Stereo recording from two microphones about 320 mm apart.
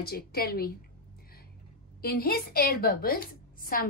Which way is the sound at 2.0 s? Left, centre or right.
Left.